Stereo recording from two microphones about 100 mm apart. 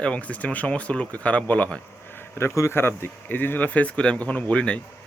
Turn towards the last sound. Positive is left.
turn(degrees=10)  # may be behind; listen again after turning